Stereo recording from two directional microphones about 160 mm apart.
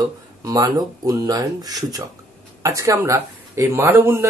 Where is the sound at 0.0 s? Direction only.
20° right (ahead or behind).